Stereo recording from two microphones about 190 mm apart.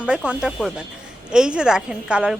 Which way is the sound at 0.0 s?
5° right (ahead or behind).